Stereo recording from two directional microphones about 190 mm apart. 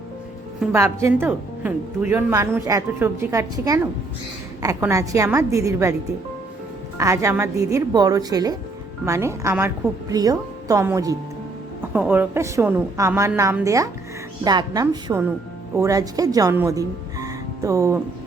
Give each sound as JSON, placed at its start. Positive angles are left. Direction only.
{"t": 0.7, "sound": "a woman's voice", "side_deg": -15}
{"t": 7.0, "sound": "a woman's voice", "side_deg": -15}